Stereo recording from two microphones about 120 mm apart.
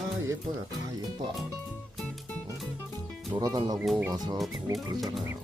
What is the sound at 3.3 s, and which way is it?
Speech, 30° right (ahead or behind).